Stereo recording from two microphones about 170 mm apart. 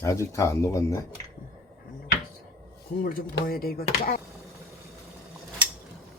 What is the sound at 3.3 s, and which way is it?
Speech, 60° left (ahead or behind).